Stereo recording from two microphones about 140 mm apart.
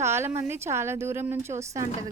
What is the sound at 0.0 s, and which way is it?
A woman's voice, 20° right (ahead or behind).